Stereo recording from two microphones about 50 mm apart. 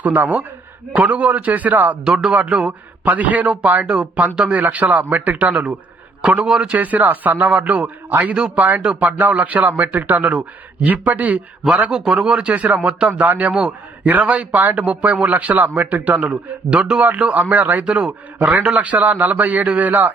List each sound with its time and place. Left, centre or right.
0.0 s a man's voice: right
2.0 s speech: centre
3.0 s a man's voice: right
6.7 s a man's voice: right
8.8 s speech: right
9.0 s a man's voice: right
11.9 s speech: centre
12.5 s a man's voice: right
12.8 s a man's voice: right
16.6 s speech: centre
17.0 s a man's voice: right